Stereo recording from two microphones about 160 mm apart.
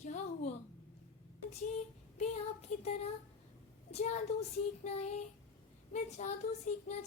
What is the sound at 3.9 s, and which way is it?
Speech, 45° left (ahead or behind).